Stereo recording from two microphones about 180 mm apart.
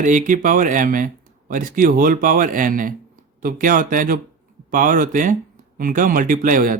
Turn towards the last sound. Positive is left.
turn(degrees=-50)  # may be behind; listen again after turning